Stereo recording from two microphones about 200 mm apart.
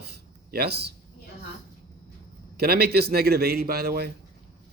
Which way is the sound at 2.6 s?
50° right (ahead or behind).